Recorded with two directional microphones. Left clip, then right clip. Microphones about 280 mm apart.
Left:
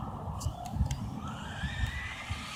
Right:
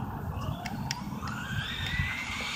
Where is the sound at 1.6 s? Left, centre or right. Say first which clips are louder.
Right 4 dB; centre.